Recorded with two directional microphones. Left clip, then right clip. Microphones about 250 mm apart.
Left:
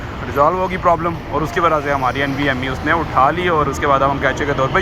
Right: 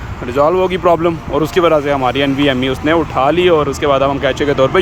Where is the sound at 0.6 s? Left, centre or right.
Right.